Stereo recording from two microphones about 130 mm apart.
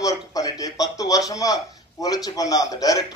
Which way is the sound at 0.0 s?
30° left (ahead or behind).